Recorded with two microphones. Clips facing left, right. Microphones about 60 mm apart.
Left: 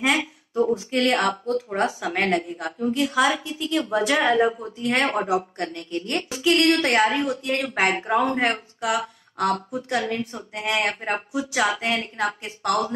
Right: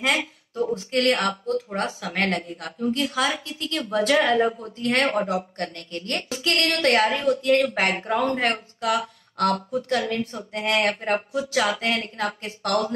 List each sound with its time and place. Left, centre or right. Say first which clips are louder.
0.7 s a woman's voice: even; centre
2.0 s a woman's voice: left 2 dB; centre
9.8 s a woman's voice: right 1 dB; centre